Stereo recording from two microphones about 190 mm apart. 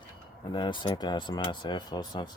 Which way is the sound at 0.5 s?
25° left (ahead or behind).